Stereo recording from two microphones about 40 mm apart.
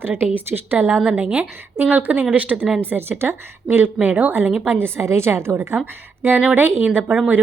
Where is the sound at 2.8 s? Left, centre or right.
Right.